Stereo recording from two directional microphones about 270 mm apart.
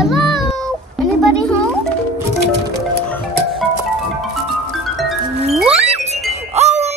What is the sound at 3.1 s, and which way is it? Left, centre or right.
Music, centre.